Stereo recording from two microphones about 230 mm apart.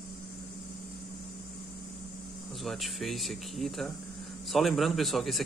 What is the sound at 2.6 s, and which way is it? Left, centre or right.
A man's voice, centre.